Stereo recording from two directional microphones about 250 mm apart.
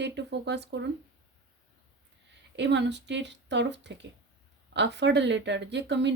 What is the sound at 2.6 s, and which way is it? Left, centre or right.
Speech, right.